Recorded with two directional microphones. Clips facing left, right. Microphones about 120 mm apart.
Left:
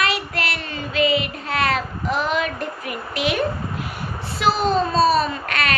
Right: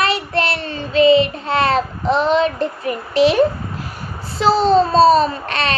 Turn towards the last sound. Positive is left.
turn(degrees=-30)  # may be behind; listen again after turning